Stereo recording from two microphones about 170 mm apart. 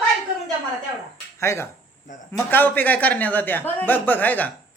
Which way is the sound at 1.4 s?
15° left (ahead or behind).